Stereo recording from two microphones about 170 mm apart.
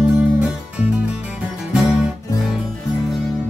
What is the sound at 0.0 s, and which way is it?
Music, 5° right (ahead or behind).